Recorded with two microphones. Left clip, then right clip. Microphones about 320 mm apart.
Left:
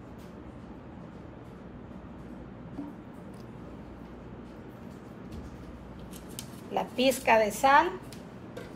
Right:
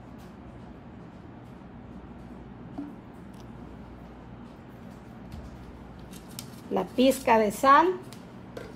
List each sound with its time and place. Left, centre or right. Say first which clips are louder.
6.7 s a woman's voice: right 3 dB; right